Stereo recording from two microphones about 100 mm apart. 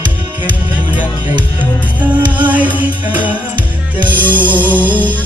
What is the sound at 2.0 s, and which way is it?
Music, 15° right (ahead or behind).